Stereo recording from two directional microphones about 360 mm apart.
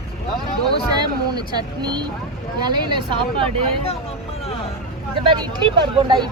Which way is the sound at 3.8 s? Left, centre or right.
Centre.